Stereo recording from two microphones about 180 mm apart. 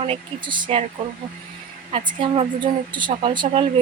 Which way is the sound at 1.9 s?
30° right (ahead or behind).